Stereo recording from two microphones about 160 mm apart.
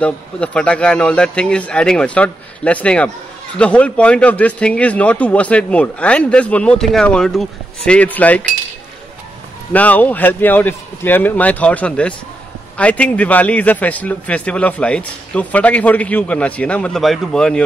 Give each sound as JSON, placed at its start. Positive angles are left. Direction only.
{"t": 0.0, "sound": "speech", "side_deg": 5}
{"t": 9.7, "sound": "speech", "side_deg": 10}